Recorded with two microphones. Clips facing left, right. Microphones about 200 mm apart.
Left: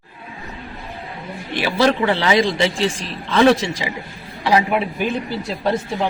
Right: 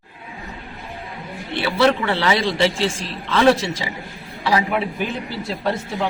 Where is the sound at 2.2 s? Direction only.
15° left (ahead or behind).